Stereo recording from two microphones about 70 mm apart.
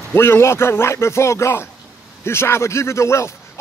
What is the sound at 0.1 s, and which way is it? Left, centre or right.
A man's voice, left.